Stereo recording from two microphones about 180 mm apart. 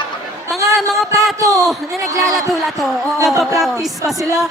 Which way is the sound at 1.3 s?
20° right (ahead or behind).